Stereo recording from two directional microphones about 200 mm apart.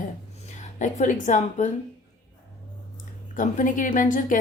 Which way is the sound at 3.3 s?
40° left (ahead or behind).